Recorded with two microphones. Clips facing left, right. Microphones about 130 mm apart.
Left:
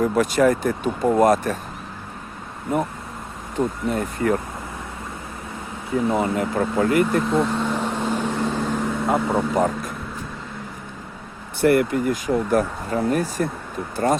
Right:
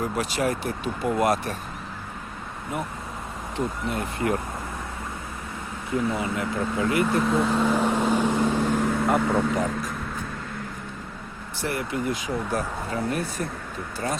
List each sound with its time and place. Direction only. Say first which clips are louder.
0.0 s speech: left 8 dB; 50° left (ahead or behind)
3.8 s speech: left 4 dB; 40° left (ahead or behind)
6.1 s speech: left 6 dB; 50° left (ahead or behind)
7.1 s vehicle: left 2 dB; centre (ahead or behind)
9.0 s speech: left 3 dB; 25° left (ahead or behind)
9.6 s speech: left 5 dB; 50° left (ahead or behind)
11.6 s speech: left 10 dB; 60° left (ahead or behind)